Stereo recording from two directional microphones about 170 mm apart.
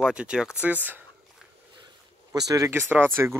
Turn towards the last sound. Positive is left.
turn(degrees=-15)  # may be behind; listen again after turning